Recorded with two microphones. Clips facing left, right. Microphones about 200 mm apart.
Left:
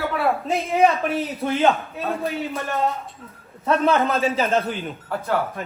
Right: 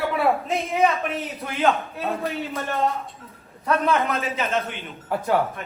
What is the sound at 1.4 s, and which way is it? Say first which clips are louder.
Speech: left 2 dB; 25° left (ahead or behind).